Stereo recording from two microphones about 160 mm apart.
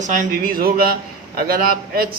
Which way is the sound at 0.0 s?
55° right (ahead or behind).